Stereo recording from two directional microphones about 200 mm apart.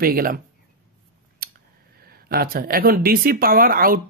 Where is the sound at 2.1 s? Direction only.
50° right (ahead or behind).